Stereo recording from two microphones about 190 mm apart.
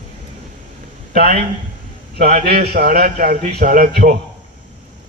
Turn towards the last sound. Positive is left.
turn(degrees=-50)  # may be behind; listen again after turning